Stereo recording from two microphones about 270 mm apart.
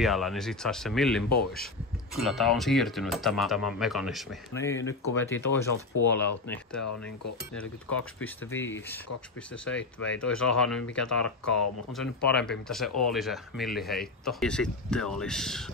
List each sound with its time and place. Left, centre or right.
0.0 s speech: centre
4.6 s speech: centre
6.8 s cutlery: left
7.5 s speech: centre
9.8 s speech: left
10.2 s speech: centre